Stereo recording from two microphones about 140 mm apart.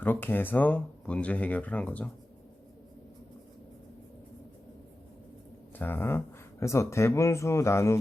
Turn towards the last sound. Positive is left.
turn(degrees=20)  # may be behind; listen again after turning